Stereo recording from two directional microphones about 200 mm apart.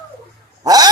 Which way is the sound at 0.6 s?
20° right (ahead or behind).